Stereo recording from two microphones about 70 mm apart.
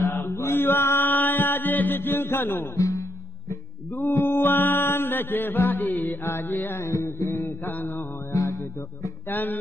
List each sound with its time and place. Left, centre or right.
0.0 s mantra: left
0.5 s mantra: left
2.8 s music: left
4.1 s mantra: left
6.2 s mantra: left
7.6 s mantra: left
8.3 s music: left
9.3 s mantra: left